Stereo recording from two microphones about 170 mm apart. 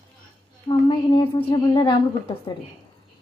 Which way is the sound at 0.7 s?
30° left (ahead or behind).